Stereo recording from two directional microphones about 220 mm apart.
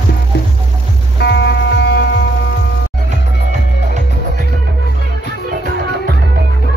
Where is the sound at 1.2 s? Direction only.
50° left (ahead or behind).